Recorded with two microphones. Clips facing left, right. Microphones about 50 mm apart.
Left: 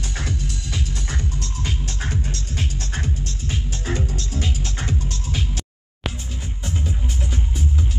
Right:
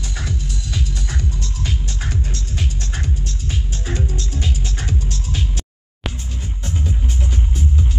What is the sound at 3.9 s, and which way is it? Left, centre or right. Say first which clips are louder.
Music: even; left.